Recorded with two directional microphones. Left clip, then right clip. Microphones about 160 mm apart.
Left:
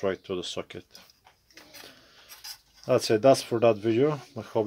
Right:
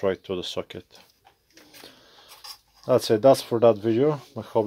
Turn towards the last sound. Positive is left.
turn(degrees=-30)  # may be behind; listen again after turning